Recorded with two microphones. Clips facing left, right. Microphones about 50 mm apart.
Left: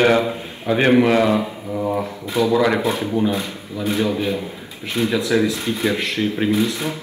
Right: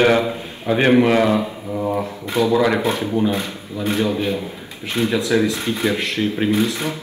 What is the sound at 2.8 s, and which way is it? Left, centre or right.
Speech, right.